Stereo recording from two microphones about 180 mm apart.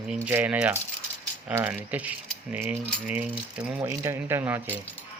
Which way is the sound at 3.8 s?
15° right (ahead or behind).